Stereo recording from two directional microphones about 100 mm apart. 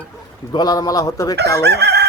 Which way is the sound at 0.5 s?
40° left (ahead or behind).